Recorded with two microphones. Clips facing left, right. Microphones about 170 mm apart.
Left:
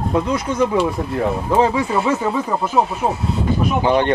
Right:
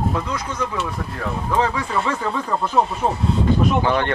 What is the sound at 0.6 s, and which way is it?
Speech, 30° left (ahead or behind).